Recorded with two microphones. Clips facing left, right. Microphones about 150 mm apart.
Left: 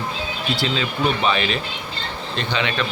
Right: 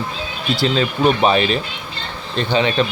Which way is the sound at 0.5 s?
40° right (ahead or behind).